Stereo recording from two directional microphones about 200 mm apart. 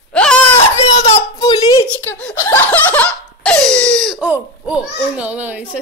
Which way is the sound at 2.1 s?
10° left (ahead or behind).